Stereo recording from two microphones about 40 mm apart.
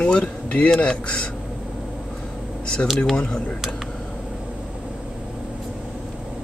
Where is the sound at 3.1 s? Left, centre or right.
Left.